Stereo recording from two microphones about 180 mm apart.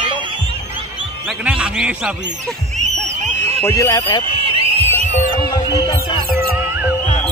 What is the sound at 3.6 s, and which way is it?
Speech, 20° left (ahead or behind).